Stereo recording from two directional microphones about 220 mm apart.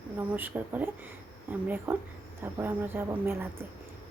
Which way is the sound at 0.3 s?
10° right (ahead or behind).